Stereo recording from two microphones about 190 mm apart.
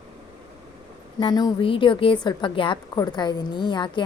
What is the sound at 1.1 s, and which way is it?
A woman's voice, 20° left (ahead or behind).